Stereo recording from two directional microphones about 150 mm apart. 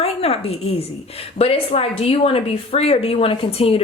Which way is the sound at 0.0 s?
40° left (ahead or behind).